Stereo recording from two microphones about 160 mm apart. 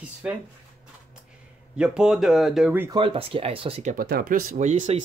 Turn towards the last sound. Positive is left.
turn(degrees=-45)  # may be behind; listen again after turning